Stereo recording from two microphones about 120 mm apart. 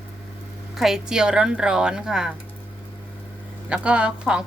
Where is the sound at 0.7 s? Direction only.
5° right (ahead or behind).